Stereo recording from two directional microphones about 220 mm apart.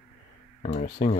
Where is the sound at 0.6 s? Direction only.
35° left (ahead or behind).